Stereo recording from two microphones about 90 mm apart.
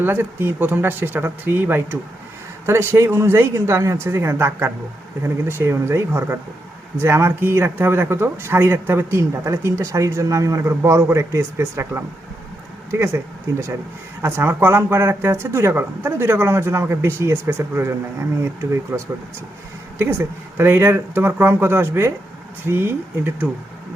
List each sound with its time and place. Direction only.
0.0 s a man's voice: 25° right (ahead or behind)